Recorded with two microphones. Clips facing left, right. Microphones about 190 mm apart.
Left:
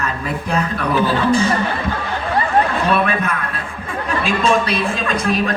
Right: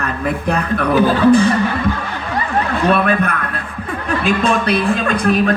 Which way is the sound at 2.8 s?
55° right (ahead or behind).